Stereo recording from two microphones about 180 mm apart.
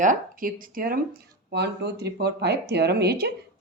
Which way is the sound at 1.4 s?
65° right (ahead or behind).